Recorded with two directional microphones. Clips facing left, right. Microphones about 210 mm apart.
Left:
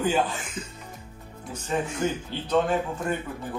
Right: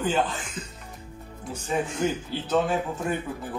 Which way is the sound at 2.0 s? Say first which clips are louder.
Right 1 dB; 10° right (ahead or behind).